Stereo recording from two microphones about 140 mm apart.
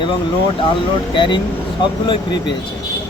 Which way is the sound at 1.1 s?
35° left (ahead or behind).